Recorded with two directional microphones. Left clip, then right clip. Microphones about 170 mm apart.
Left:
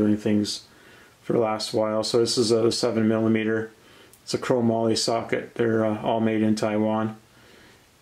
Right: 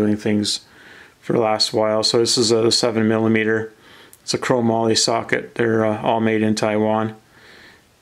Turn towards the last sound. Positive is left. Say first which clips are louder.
# right 6 dB
turn(degrees=-30)  # may be behind; listen again after turning